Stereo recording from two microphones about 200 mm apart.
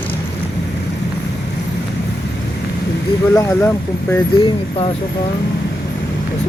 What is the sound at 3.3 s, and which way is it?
Speech, 15° left (ahead or behind).